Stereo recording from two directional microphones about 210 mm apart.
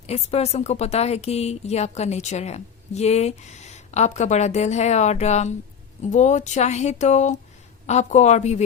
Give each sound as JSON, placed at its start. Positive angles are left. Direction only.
{"t": 0.1, "sound": "a woman's voice", "side_deg": 30}